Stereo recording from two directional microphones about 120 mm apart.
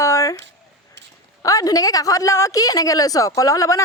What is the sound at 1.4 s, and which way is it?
A woman's voice, 30° left (ahead or behind).